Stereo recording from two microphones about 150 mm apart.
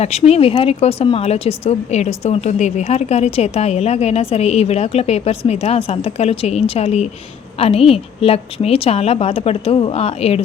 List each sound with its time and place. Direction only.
0.0 s a woman's voice: 45° left (ahead or behind)